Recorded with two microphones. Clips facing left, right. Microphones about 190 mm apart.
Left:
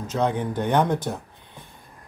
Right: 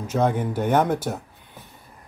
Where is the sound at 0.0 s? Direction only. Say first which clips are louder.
Right 2 dB; 10° right (ahead or behind).